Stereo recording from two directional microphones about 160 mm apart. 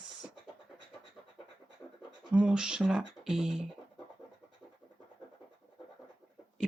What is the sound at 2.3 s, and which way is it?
Speech, 5° right (ahead or behind).